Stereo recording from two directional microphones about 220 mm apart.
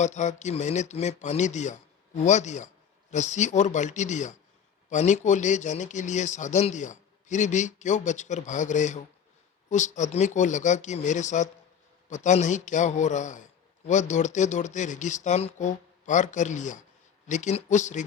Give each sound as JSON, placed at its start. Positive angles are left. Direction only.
{"t": 0.0, "sound": "a man's voice", "side_deg": 30}